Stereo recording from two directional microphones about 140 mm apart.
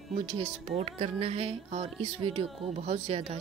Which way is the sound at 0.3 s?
45° right (ahead or behind).